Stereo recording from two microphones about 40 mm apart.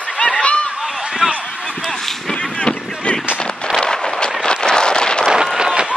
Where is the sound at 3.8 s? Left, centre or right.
Left.